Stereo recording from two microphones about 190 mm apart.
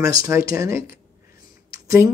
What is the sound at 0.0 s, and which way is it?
Speech, 15° right (ahead or behind).